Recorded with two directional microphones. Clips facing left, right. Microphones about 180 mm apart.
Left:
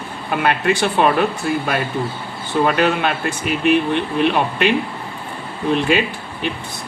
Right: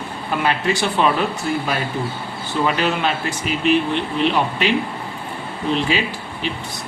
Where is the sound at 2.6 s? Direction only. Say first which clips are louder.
Left 2 dB; 55° left (ahead or behind).